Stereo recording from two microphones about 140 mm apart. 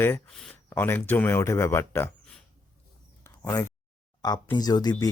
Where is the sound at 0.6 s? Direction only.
15° left (ahead or behind).